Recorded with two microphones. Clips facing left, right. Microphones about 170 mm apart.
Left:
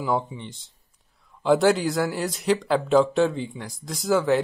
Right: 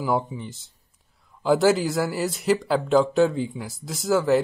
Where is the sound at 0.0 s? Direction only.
Centre (ahead or behind).